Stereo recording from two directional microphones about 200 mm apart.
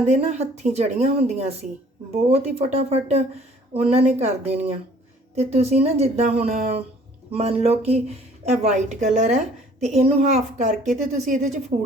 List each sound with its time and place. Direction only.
0.0 s speech: 35° right (ahead or behind)